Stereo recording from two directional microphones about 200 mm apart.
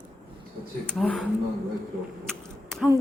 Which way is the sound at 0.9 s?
5° left (ahead or behind).